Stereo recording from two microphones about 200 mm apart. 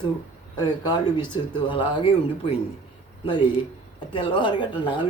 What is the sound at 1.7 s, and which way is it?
Speech, 25° left (ahead or behind).